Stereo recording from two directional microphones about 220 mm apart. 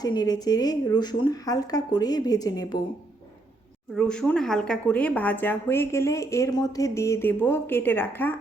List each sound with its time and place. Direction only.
0.0 s speech: 20° left (ahead or behind)
3.9 s speech: 5° left (ahead or behind)